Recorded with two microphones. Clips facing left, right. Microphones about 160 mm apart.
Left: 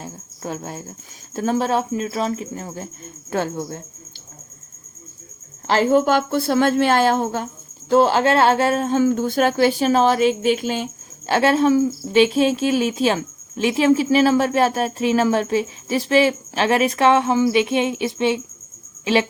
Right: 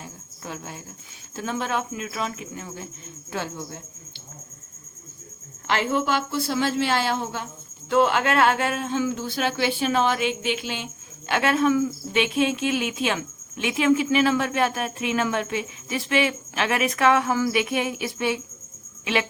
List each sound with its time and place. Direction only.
0.0 s a woman's voice: 40° left (ahead or behind)
5.6 s a woman's voice: 35° left (ahead or behind)
7.9 s a woman's voice: 35° left (ahead or behind)